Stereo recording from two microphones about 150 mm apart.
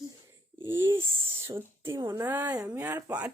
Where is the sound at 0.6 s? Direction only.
15° right (ahead or behind).